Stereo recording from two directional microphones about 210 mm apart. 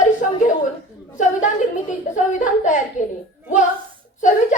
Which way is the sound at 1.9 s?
35° left (ahead or behind).